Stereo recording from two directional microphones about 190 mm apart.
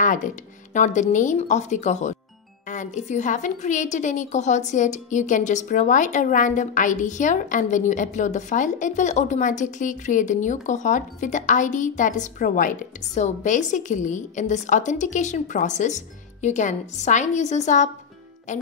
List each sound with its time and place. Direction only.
0.0 s a woman's voice: 45° left (ahead or behind)